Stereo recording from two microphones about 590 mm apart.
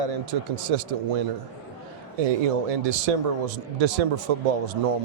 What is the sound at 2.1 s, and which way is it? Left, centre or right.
A man's voice, right.